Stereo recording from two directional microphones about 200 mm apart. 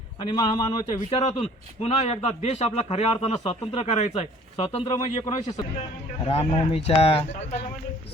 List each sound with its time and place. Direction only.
0.2 s speech: 20° left (ahead or behind)
1.1 s a man's voice: 30° left (ahead or behind)
4.9 s speech: 20° left (ahead or behind)